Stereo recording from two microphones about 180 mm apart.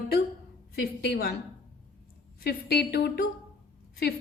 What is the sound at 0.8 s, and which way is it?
Speech, 55° left (ahead or behind).